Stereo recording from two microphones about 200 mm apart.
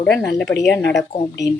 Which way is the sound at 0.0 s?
5° left (ahead or behind).